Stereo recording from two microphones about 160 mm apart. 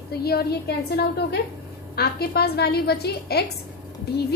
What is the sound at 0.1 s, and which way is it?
A woman's voice, 80° left.